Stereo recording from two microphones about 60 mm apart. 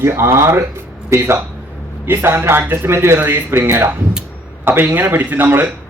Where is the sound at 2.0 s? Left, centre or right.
Right.